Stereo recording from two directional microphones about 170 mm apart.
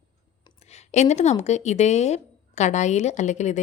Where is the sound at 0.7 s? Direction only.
40° left (ahead or behind).